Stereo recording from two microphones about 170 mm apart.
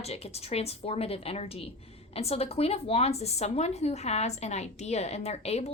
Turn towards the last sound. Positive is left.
turn(degrees=40)  # may be behind; listen again after turning